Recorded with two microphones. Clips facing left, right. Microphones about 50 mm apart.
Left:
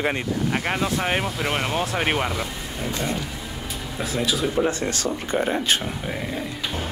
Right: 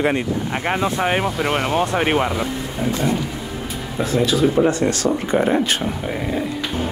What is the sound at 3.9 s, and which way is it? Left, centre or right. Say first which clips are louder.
Speech: right 6 dB; centre.